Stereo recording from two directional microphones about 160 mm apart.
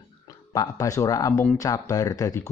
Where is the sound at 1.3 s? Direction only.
10° left (ahead or behind).